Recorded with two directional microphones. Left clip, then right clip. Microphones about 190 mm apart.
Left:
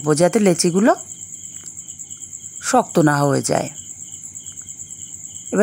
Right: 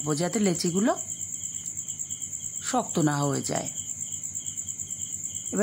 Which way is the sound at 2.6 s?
35° left (ahead or behind).